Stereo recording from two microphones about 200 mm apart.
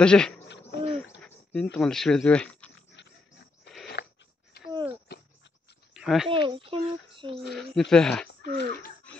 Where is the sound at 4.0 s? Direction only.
55° left (ahead or behind).